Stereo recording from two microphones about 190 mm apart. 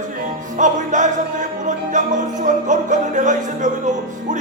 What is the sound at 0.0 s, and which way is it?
Music, 40° right (ahead or behind).